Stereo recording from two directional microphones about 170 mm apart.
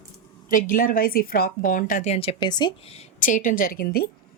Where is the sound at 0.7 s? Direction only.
55° left (ahead or behind); by 3.1 s 35° left (ahead or behind).